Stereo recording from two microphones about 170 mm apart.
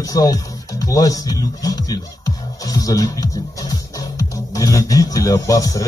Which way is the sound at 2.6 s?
20° left (ahead or behind).